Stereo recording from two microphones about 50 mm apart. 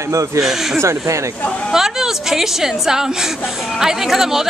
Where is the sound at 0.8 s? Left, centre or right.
Right.